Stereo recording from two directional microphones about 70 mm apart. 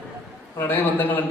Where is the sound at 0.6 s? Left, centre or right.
Left.